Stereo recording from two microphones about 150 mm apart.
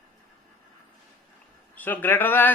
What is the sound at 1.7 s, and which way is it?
Speech, 10° left (ahead or behind).